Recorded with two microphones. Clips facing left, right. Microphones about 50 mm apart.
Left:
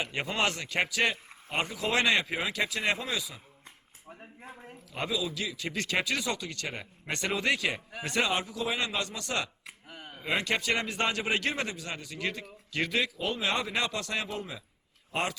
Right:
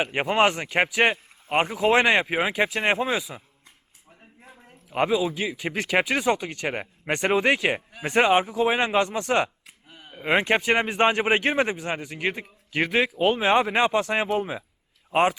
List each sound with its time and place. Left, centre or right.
0.0 s a man's voice: right
1.1 s a sound: right
1.6 s a man's voice: right
4.1 s a sound: left
4.9 s a man's voice: right
5.5 s speech: centre
6.0 s a man's voice: right
9.6 s a sound: left
10.1 s a man's voice: right
13.0 s speech: right